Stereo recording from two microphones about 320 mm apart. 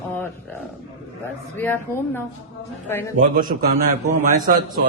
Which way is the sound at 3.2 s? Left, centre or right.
Right.